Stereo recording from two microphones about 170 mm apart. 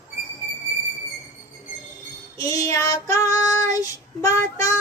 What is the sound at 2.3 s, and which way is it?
Child singing, 20° left (ahead or behind).